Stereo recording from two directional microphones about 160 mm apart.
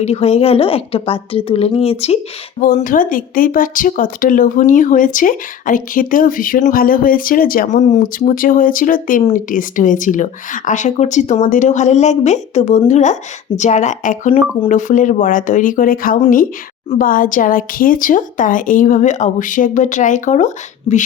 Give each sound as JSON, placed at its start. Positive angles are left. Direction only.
{"t": 0.0, "sound": "a woman's voice", "side_deg": 40}
{"t": 2.6, "sound": "a woman's voice", "side_deg": 60}